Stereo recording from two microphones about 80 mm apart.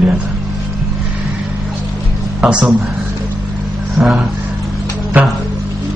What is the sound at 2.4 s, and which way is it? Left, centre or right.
Speech, centre.